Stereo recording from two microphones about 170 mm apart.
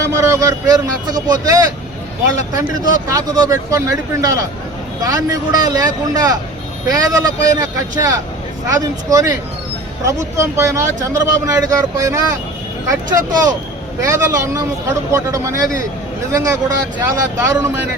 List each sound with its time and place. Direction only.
0.0 s speech: 15° right (ahead or behind)